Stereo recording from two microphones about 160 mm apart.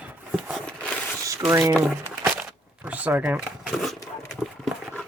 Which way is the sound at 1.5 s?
20° right (ahead or behind).